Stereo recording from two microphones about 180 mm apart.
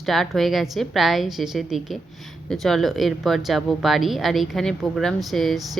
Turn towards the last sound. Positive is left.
turn(degrees=0)  # may be behind; listen again after turning